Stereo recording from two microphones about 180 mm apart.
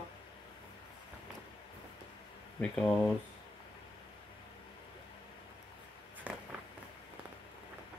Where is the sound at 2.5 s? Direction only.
5° left (ahead or behind).